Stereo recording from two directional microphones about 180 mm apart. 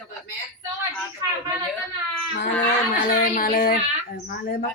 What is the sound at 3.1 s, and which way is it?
Speech, 50° left (ahead or behind).